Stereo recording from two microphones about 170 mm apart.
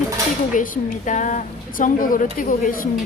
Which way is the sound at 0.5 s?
50° left (ahead or behind).